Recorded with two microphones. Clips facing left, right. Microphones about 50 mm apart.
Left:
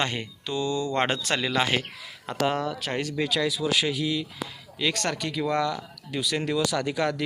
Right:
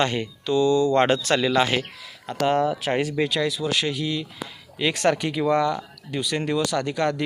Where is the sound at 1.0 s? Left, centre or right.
Centre.